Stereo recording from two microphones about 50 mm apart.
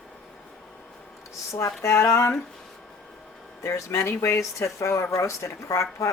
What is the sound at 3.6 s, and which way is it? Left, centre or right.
Speech, left.